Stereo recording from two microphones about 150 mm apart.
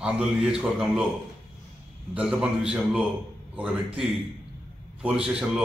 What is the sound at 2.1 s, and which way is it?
A man's voice, 5° right (ahead or behind).